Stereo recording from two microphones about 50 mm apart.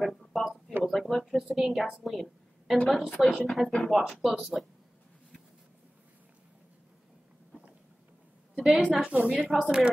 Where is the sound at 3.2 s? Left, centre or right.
Centre.